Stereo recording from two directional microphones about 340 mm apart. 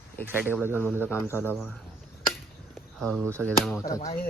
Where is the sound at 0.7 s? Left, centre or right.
Centre.